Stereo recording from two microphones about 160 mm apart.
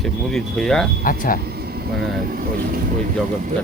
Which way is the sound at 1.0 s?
60° left (ahead or behind).